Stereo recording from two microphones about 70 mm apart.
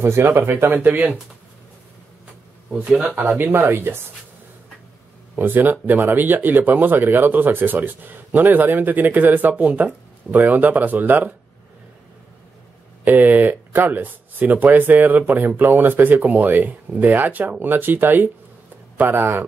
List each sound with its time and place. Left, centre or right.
0.0 s speech: right
0.8 s speech: right
3.3 s speech: right
5.3 s speech: right
13.0 s speech: right